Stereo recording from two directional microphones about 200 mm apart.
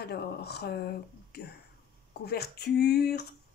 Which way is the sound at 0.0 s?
50° left (ahead or behind).